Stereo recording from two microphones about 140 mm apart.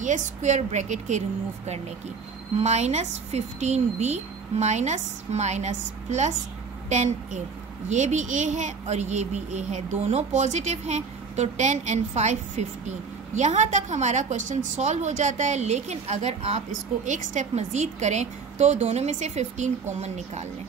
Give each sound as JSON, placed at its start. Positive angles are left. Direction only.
{"t": 0.0, "sound": "a woman's voice", "side_deg": -60}
{"t": 2.6, "sound": "a woman's voice", "side_deg": -55}